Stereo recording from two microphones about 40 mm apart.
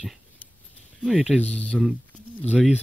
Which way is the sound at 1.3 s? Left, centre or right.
Left.